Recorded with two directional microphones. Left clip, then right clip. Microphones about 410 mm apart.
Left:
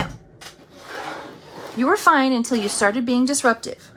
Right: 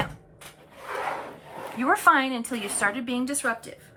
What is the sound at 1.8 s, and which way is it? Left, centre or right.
Speech, centre.